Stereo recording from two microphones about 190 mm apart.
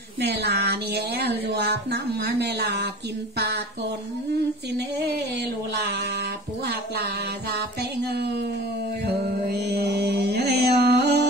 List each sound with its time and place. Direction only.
0.2 s speech: 60° right (ahead or behind)
4.7 s speech: 65° right (ahead or behind)
8.0 s speech: 55° right (ahead or behind)
9.0 s music: 60° right (ahead or behind)